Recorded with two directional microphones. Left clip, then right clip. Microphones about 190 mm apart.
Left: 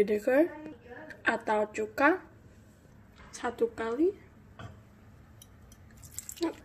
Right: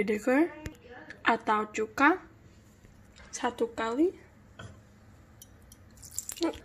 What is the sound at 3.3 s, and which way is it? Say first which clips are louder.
Speech: even; 45° right (ahead or behind).